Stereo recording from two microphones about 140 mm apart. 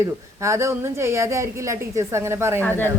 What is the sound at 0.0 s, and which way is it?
A woman's voice, 20° right (ahead or behind).